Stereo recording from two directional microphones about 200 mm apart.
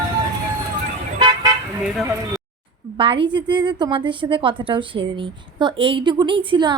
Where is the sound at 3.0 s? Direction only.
25° right (ahead or behind).